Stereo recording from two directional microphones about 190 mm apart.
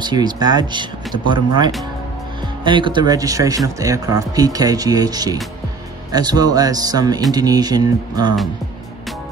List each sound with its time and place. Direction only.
0.0 s speech: 20° right (ahead or behind)